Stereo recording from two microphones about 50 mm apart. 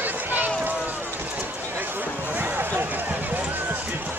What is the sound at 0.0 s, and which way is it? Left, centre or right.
Run, right.